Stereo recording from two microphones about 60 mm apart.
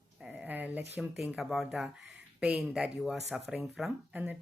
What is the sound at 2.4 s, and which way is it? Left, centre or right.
Speech, centre.